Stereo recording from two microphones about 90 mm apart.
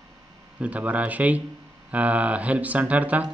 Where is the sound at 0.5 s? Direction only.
15° right (ahead or behind).